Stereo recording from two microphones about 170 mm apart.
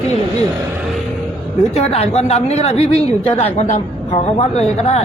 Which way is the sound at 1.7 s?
35° left (ahead or behind).